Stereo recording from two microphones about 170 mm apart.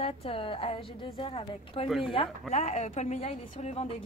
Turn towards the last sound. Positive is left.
turn(degrees=40)  # may be behind; listen again after turning